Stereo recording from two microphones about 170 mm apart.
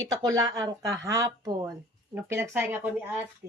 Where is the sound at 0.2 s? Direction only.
20° right (ahead or behind).